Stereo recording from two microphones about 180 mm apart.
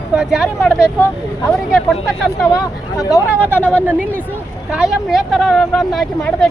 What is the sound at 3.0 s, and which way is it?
Speech, 20° left (ahead or behind).